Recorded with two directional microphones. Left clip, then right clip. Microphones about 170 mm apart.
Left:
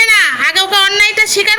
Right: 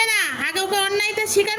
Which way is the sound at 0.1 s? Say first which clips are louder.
Left 12 dB; 25° right (ahead or behind).